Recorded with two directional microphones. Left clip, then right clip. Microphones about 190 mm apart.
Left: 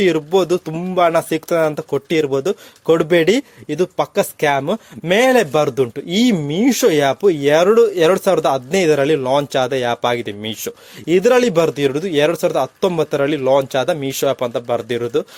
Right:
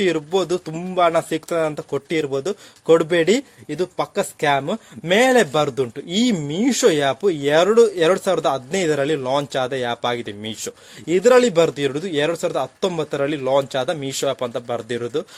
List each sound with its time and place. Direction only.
0.0 s speech: 30° left (ahead or behind)